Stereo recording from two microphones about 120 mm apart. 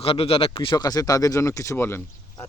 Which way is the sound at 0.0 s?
50° left (ahead or behind).